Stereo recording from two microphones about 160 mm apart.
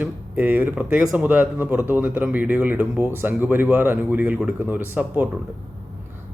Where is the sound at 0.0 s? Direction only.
10° right (ahead or behind).